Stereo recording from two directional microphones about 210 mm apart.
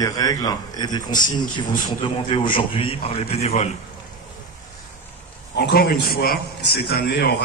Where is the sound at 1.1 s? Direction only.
40° left (ahead or behind).